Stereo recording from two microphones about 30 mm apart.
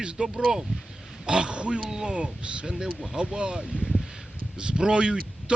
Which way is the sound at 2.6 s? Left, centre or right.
Right.